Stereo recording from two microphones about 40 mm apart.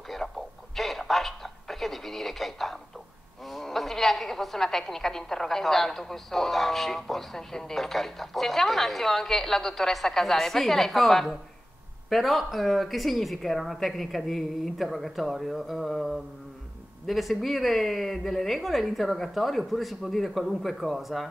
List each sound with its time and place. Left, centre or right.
0.2 s radio: left
0.7 s radio: centre
3.4 s a woman's voice: centre